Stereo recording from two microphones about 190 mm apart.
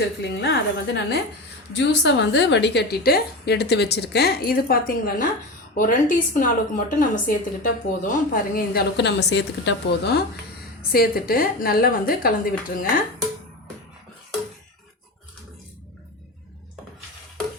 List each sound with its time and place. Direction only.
0.2 s a woman's voice: 65° left (ahead or behind); by 13.1 s 45° left (ahead or behind)